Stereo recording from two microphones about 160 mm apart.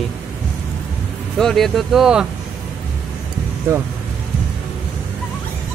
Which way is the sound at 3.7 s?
15° right (ahead or behind).